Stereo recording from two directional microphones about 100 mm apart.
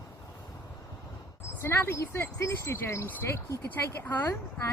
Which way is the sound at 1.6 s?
25° left (ahead or behind).